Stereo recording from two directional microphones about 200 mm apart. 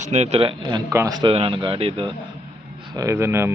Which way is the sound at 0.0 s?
35° right (ahead or behind).